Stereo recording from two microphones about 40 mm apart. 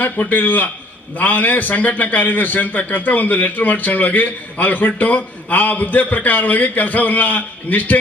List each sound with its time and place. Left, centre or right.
0.0 s a man's voice: left